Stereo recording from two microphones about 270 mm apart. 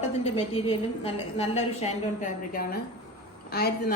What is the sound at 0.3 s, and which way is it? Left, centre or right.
A woman's voice, left.